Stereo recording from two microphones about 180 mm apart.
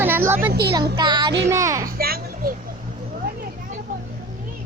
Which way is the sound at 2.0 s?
55° right (ahead or behind).